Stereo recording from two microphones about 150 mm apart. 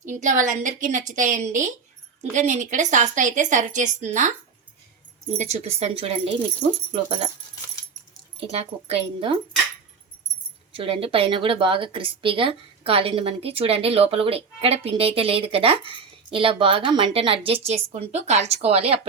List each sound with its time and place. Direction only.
0.0 s a woman's voice: 55° right (ahead or behind)
5.4 s speech: 45° right (ahead or behind)
8.4 s speech: 40° right (ahead or behind)
10.8 s speech: 35° right (ahead or behind)